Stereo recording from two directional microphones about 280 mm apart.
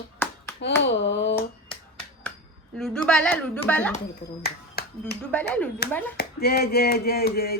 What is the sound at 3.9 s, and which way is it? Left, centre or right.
Speech, left.